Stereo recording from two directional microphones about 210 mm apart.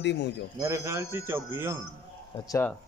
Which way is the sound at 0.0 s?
55° left (ahead or behind).